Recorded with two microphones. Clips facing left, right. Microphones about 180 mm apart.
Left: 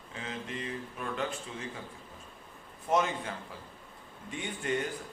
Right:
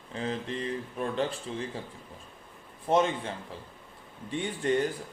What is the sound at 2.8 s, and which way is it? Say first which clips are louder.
A man's voice: right 4 dB; 30° right (ahead or behind).